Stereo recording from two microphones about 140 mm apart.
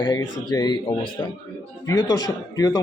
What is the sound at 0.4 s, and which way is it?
Speech, 30° left (ahead or behind).